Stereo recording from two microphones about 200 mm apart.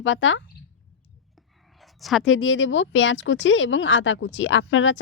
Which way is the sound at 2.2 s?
70° left (ahead or behind).